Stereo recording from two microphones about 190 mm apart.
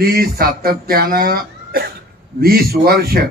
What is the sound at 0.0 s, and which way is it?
Speech, 50° right (ahead or behind).